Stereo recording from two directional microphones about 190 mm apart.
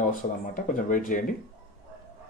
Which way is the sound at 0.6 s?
45° left (ahead or behind).